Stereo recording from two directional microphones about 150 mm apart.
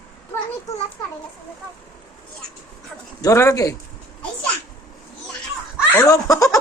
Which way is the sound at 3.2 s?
20° left (ahead or behind).